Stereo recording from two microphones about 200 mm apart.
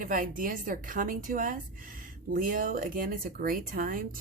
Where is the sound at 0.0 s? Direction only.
45° right (ahead or behind).